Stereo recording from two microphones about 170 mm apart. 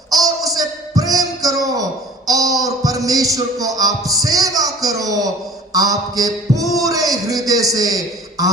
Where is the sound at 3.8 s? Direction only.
20° right (ahead or behind).